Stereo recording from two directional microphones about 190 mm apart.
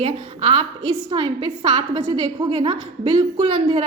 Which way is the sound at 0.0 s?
30° right (ahead or behind).